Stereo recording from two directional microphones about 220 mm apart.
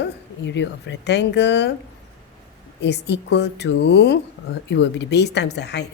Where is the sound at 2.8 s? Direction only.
50° left (ahead or behind).